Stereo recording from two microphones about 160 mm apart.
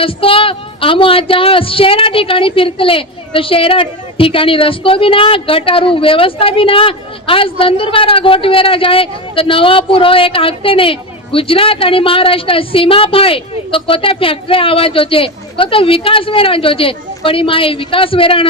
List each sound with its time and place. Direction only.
0.0 s speech: 35° left (ahead or behind)